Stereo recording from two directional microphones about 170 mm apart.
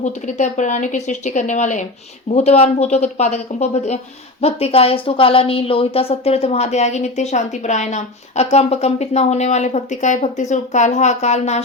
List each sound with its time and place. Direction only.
0.0 s a woman's voice: 45° left (ahead or behind)